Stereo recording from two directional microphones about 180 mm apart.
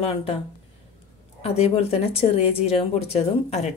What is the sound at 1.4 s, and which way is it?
Speech, 35° left (ahead or behind).